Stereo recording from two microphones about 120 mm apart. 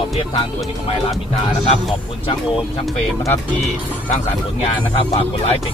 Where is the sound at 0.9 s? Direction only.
55° left (ahead or behind).